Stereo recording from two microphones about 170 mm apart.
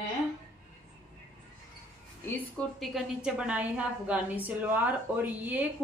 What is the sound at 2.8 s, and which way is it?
A woman's voice, centre (ahead or behind).